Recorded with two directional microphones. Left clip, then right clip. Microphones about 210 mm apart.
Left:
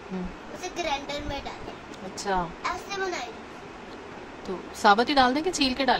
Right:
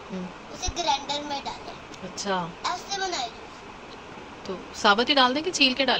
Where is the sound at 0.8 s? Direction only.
15° left (ahead or behind).